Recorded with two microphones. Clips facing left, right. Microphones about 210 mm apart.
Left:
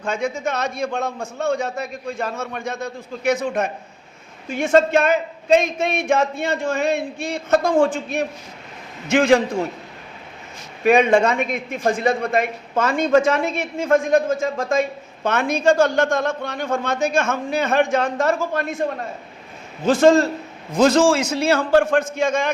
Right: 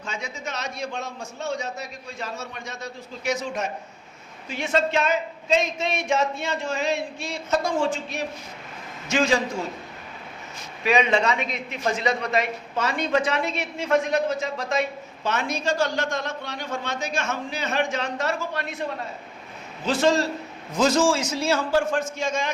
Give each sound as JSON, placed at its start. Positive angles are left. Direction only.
{"t": 0.0, "sound": "a man's voice", "side_deg": 55}
{"t": 10.8, "sound": "a man's voice", "side_deg": 50}